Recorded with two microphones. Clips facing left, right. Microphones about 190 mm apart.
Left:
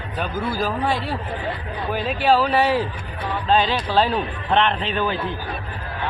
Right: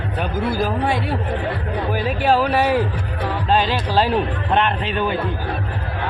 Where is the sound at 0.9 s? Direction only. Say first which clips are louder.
Right 2 dB; 60° right (ahead or behind).